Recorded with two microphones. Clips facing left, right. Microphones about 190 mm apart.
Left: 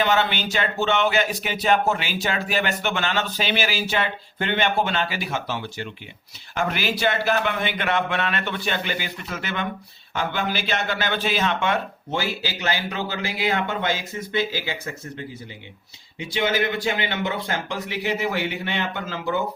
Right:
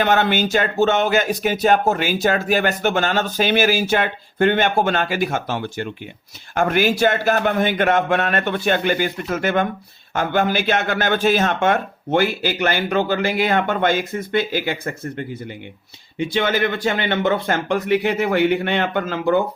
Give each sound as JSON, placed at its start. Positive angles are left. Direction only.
{"t": 0.0, "sound": "speech", "side_deg": -50}
{"t": 16.1, "sound": "speech", "side_deg": -55}